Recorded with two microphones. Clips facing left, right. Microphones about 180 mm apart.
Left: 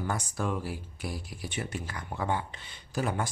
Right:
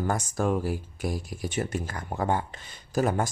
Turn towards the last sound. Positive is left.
turn(degrees=-45)  # may be behind; listen again after turning